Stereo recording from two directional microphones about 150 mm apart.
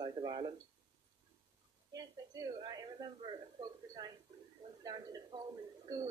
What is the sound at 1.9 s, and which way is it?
A woman's voice, 25° right (ahead or behind).